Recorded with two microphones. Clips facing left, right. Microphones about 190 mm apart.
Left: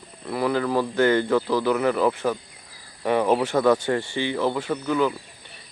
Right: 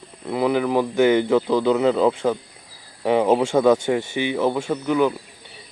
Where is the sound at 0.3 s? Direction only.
20° right (ahead or behind).